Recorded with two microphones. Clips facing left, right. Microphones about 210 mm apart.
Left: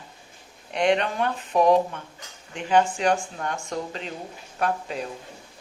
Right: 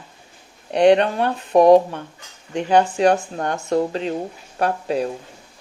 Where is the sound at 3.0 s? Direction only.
40° right (ahead or behind).